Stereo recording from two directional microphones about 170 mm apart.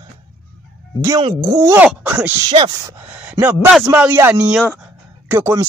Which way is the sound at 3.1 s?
10° right (ahead or behind).